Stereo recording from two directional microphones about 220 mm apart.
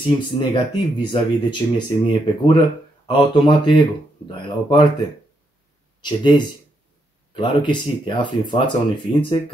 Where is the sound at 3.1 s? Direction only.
20° left (ahead or behind).